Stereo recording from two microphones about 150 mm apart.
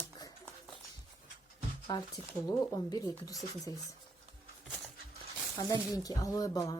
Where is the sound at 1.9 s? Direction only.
25° left (ahead or behind).